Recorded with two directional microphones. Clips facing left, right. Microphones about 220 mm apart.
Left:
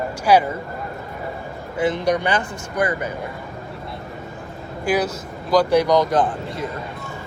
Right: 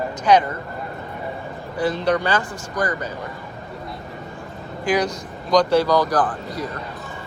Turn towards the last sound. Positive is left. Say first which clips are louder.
# left 1 dB
turn(degrees=25)  # may be behind; listen again after turning